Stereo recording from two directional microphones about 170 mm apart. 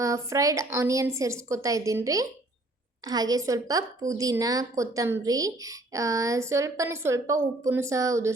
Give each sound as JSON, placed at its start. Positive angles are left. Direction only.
{"t": 0.0, "sound": "a woman's voice", "side_deg": -20}